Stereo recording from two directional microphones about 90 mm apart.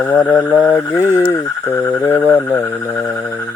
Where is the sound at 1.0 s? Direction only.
20° right (ahead or behind).